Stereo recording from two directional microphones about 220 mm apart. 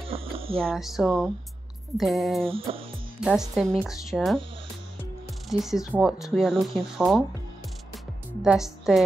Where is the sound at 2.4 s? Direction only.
25° right (ahead or behind).